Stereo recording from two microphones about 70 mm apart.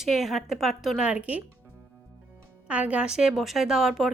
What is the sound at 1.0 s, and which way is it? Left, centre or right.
Speech, centre.